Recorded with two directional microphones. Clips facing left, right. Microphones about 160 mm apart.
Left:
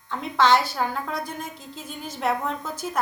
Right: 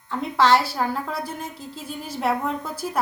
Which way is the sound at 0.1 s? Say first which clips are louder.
Right 1 dB; 5° right (ahead or behind).